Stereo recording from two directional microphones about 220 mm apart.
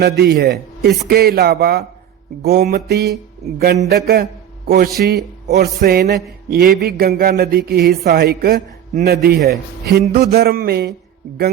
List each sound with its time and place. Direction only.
0.0 s speech: 45° right (ahead or behind)